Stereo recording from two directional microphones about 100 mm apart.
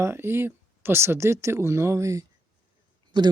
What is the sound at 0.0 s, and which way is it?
Speech, 25° right (ahead or behind).